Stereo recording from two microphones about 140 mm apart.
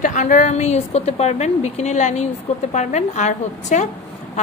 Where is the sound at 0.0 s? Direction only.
65° left (ahead or behind).